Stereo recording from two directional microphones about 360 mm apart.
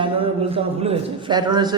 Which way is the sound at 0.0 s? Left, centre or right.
Centre.